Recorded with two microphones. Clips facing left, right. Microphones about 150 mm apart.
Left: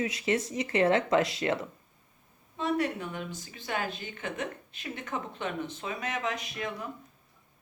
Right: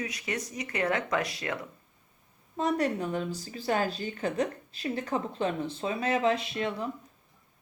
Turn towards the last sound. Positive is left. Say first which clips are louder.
# right 5 dB
turn(degrees=-30)  # may be behind; listen again after turning